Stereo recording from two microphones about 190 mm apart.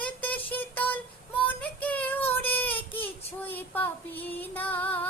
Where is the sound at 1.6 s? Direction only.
10° left (ahead or behind).